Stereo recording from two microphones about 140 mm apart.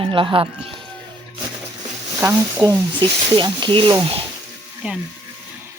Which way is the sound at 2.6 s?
35° right (ahead or behind).